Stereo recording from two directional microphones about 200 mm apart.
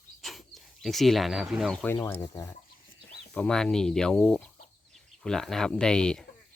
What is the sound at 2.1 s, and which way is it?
Speech, 20° left (ahead or behind).